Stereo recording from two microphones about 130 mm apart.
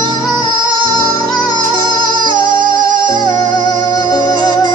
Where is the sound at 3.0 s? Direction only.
30° left (ahead or behind).